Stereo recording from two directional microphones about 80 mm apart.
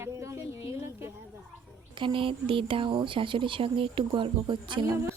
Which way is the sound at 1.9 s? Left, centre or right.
Right.